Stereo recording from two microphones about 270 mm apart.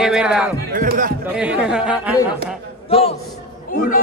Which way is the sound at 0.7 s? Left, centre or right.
Right.